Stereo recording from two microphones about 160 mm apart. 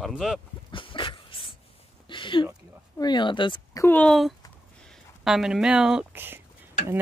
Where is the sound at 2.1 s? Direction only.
30° left (ahead or behind).